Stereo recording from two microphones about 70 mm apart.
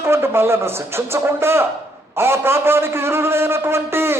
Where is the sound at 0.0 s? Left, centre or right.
Right.